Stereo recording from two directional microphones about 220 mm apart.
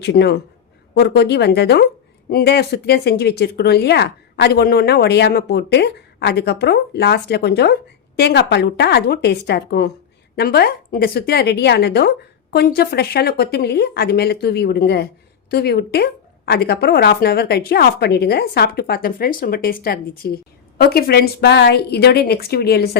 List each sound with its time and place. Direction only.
0.0 s speech: 50° left (ahead or behind)